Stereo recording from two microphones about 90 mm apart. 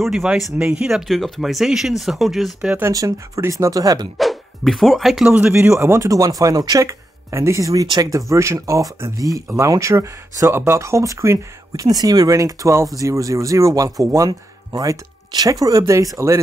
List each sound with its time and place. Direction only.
0.0 s speech: 5° right (ahead or behind)
3.1 s speech: 35° right (ahead or behind)
4.2 s speech: centre (ahead or behind)
5.3 s speech: 10° right (ahead or behind)
5.8 s speech: 30° right (ahead or behind)